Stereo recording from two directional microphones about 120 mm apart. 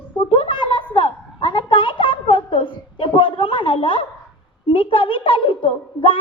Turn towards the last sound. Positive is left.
turn(degrees=45)  # may be behind; listen again after turning